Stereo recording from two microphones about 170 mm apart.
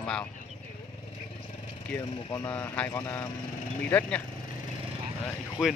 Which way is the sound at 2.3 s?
10° left (ahead or behind).